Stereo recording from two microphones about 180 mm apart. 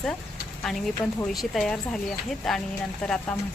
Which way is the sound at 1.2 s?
Centre (ahead or behind).